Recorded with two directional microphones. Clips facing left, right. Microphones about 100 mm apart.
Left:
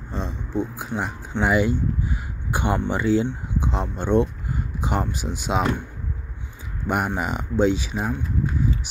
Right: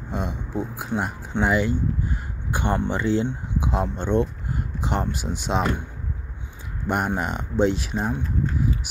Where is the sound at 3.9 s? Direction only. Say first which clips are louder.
Left 5 dB; 15° left (ahead or behind).